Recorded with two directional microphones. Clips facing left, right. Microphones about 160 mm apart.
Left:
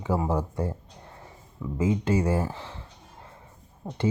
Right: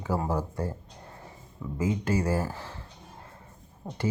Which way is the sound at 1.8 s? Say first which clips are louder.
Left 3 dB; 25° left (ahead or behind).